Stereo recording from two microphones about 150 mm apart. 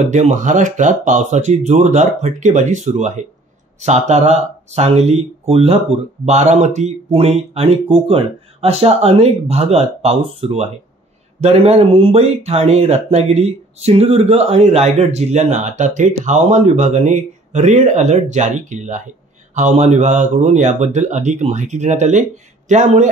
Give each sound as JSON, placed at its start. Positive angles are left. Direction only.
{"t": 0.1, "sound": "speech", "side_deg": -50}